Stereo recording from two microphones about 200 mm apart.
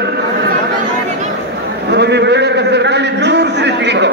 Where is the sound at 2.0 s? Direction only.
60° right (ahead or behind).